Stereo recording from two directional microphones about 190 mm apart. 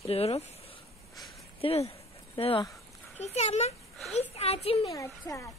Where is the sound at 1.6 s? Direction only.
30° left (ahead or behind).